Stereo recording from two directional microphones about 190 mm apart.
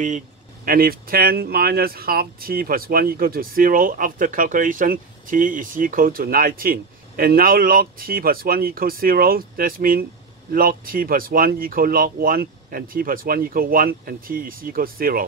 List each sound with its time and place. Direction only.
0.7 s speech: 50° right (ahead or behind)